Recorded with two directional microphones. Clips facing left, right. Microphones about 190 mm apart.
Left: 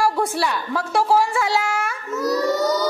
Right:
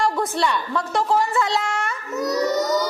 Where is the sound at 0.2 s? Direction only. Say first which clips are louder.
Even; 5° left (ahead or behind).